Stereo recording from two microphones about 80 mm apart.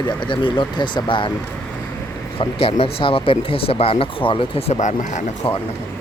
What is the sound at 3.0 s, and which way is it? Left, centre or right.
Speech, left.